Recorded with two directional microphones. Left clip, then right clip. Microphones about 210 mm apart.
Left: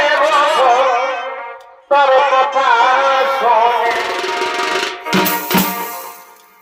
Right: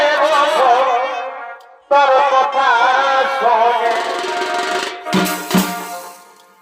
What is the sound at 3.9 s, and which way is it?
Music, 15° right (ahead or behind).